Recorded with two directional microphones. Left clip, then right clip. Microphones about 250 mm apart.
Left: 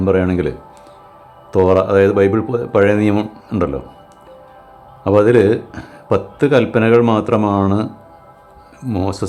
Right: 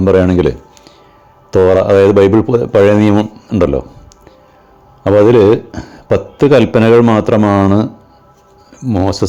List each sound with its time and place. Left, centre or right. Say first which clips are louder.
0.0 s a man's voice: right 6 dB; right
5.0 s a man's voice: right 4 dB; centre